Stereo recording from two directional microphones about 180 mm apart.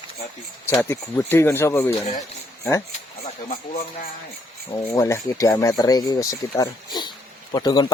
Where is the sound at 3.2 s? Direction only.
40° left (ahead or behind).